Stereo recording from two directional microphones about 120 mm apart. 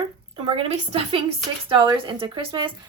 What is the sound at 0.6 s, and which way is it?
Speech, 50° right (ahead or behind).